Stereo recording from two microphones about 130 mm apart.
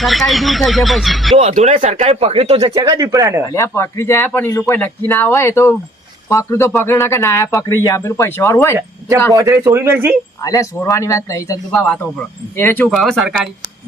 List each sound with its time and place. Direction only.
0.0 s speech: centre (ahead or behind)
1.4 s speech: 60° right (ahead or behind)
2.7 s speech: 30° right (ahead or behind)
3.5 s speech: 20° left (ahead or behind)
9.3 s speech: 25° right (ahead or behind)
10.4 s speech: 25° left (ahead or behind)
11.7 s speech: 10° left (ahead or behind)
12.9 s speech: centre (ahead or behind)